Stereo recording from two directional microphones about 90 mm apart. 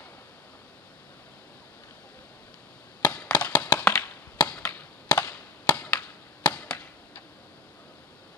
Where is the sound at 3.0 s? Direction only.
20° left (ahead or behind).